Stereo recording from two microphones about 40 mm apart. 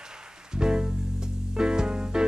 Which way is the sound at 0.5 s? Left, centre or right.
Centre.